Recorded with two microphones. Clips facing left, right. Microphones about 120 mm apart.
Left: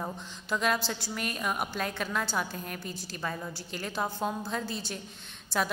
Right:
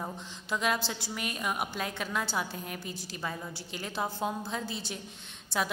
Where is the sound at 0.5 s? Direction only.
15° right (ahead or behind).